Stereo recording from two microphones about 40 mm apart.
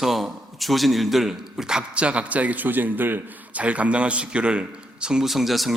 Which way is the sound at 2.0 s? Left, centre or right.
Right.